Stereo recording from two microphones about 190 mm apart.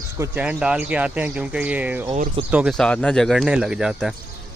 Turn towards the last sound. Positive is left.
turn(degrees=0)  # may be behind; listen again after turning